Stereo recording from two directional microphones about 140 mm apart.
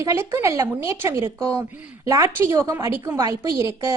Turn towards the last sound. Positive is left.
turn(degrees=-20)  # may be behind; listen again after turning